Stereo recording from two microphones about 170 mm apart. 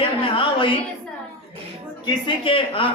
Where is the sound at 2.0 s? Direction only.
30° left (ahead or behind).